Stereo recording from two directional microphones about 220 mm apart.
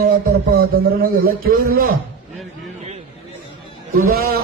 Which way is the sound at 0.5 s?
45° right (ahead or behind).